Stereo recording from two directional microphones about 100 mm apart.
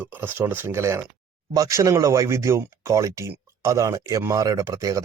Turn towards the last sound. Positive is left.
turn(degrees=-35)  # may be behind; listen again after turning